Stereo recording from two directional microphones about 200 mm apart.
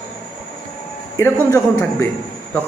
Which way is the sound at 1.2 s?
15° left (ahead or behind).